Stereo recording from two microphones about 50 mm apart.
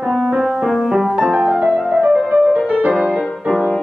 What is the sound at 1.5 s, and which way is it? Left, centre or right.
Music, centre.